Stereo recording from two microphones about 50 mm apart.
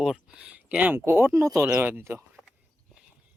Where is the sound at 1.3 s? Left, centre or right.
Right.